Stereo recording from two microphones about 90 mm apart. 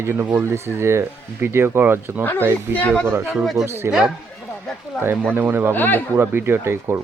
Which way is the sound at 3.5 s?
30° right (ahead or behind).